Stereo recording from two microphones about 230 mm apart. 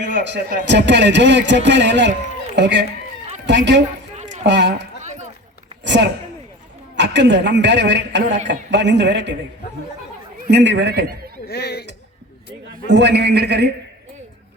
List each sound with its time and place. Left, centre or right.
0.1 s a man's voice: right
4.1 s a sound: right
4.4 s a man's voice: right
5.0 s a sound: right
5.8 s a sound: right
6.9 s a man's voice: right
10.5 s a man's voice: right
11.4 s speech: left
12.9 s a man's voice: right